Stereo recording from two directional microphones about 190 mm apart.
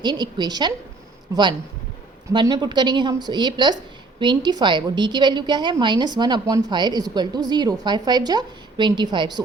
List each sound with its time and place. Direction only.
0.0 s a woman's voice: 25° right (ahead or behind)
2.3 s a woman's voice: 20° right (ahead or behind)